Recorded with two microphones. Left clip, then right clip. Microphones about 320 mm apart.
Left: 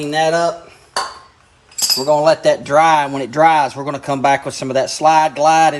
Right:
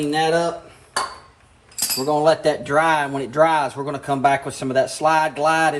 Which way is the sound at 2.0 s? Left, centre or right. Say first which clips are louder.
Left 4 dB; left.